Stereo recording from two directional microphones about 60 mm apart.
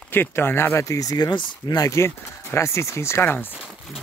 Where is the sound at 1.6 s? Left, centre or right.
Left.